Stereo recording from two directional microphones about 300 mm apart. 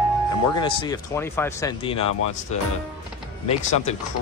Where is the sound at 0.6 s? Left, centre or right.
Centre.